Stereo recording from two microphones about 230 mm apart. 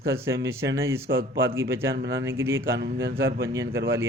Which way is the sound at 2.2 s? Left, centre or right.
Centre.